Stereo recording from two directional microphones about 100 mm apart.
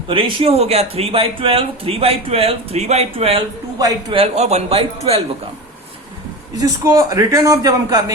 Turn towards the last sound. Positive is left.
turn(degrees=-35)  # may be behind; listen again after turning